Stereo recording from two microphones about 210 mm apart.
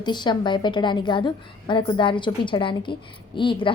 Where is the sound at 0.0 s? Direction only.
20° left (ahead or behind).